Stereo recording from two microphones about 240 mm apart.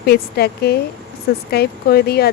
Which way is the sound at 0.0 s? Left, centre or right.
Left.